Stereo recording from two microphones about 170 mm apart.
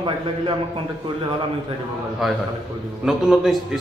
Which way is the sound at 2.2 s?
Centre (ahead or behind).